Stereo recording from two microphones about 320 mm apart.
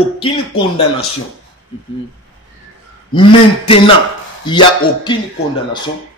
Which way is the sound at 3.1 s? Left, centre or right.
Centre.